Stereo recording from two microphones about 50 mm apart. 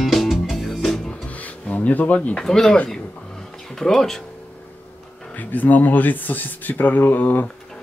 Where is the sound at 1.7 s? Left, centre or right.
Left.